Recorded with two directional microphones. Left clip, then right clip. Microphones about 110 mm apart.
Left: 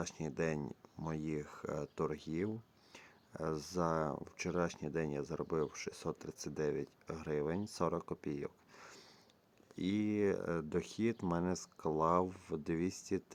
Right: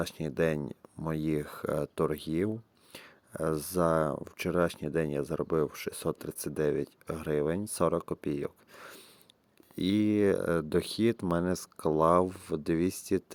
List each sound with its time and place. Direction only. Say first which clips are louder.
0.0 s speech: right 9 dB; 45° right (ahead or behind)